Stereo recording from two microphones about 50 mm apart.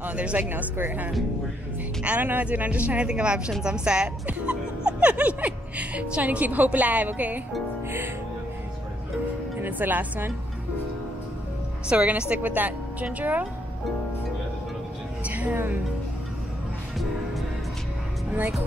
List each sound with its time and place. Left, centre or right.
0.0 s speech: right
0.4 s a woman's voice: right
9.6 s speech: right
11.9 s speech: right
15.2 s music: right